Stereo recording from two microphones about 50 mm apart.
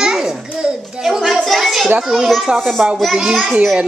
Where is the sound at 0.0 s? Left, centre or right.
Centre.